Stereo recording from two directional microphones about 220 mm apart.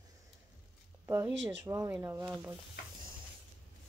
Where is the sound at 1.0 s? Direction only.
10° right (ahead or behind).